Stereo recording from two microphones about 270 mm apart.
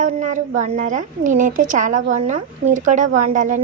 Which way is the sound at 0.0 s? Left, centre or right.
Right.